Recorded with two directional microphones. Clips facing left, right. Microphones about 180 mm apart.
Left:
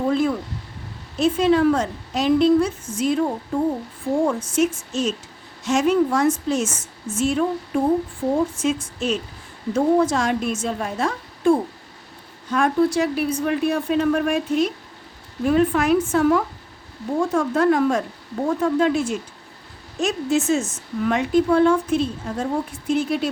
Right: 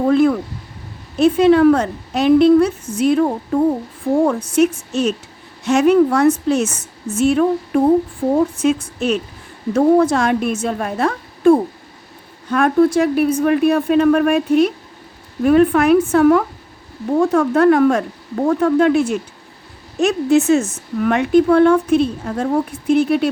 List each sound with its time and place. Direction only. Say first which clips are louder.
0.1 s speech: right 7 dB; 65° right (ahead or behind)
4.1 s a woman's voice: right 5 dB; 45° right (ahead or behind)
4.5 s speech: right 5 dB; 65° right (ahead or behind)